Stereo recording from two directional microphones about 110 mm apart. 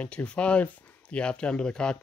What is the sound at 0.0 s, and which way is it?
Speech, 10° left (ahead or behind).